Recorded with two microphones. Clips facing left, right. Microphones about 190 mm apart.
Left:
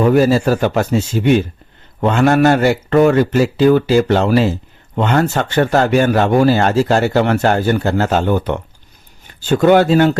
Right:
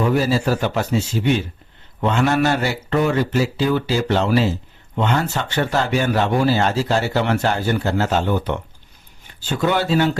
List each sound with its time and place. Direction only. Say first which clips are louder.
0.0 s speech: left 6 dB; 50° left (ahead or behind)